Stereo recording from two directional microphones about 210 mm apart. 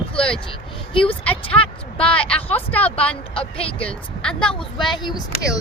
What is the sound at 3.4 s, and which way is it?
Speech, 25° left (ahead or behind).